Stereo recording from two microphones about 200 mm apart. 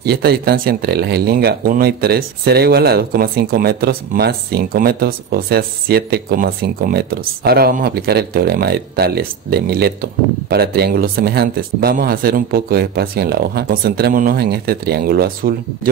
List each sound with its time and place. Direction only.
0.0 s speech: 50° right (ahead or behind)